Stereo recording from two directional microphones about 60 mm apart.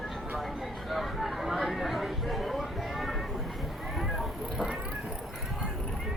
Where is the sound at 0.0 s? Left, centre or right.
Centre.